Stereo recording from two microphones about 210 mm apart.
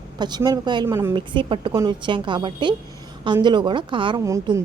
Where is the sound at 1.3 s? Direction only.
25° right (ahead or behind).